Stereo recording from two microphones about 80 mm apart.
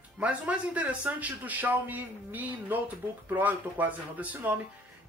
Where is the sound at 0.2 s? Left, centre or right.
Centre.